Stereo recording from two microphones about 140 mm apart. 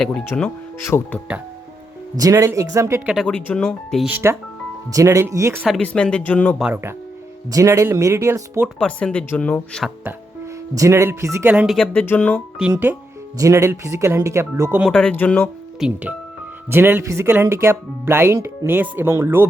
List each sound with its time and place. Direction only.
0.0 s speech: 5° left (ahead or behind)
2.1 s speech: 25° right (ahead or behind)
3.2 s speech: 10° left (ahead or behind)
4.0 s speech: 15° right (ahead or behind)
5.6 s speech: 5° left (ahead or behind)
7.5 s speech: 20° right (ahead or behind)
8.8 s speech: 5° left (ahead or behind)
10.8 s speech: 20° right (ahead or behind)
11.6 s speech: centre (ahead or behind)
11.9 s speech: 10° left (ahead or behind)
13.4 s speech: 20° right (ahead or behind)
14.8 s speech: 10° left (ahead or behind)
15.8 s speech: 5° right (ahead or behind)
16.6 s speech: 15° right (ahead or behind)